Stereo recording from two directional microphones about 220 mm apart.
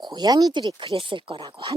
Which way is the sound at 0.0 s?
20° right (ahead or behind).